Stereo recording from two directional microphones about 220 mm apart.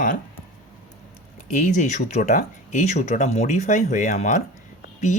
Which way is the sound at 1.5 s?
35° left (ahead or behind).